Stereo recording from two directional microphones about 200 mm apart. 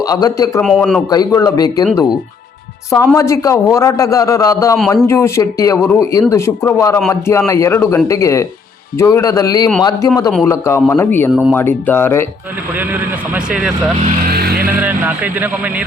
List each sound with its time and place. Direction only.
0.0 s speech: 20° left (ahead or behind)
0.6 s speech: centre (ahead or behind)
1.1 s speech: 20° left (ahead or behind)
2.9 s speech: 15° left (ahead or behind)
11.3 s speech: 5° right (ahead or behind)
11.5 s speech: 10° left (ahead or behind)
12.9 s speech: 5° right (ahead or behind)
14.3 s vehicle: 50° right (ahead or behind)
14.8 s speech: 10° right (ahead or behind)